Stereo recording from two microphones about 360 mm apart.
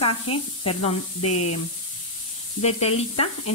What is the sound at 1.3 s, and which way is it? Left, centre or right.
Speech, left.